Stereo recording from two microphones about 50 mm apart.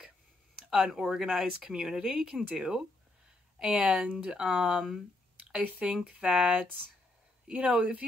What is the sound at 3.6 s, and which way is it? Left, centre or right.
Speech, right.